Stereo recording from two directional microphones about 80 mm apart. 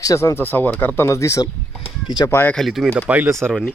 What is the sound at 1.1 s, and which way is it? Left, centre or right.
Speech, left.